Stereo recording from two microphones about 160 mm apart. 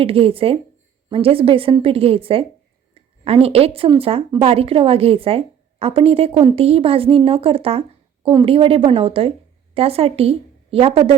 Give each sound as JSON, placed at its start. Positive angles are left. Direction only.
{"t": 0.0, "sound": "a woman's voice", "side_deg": -35}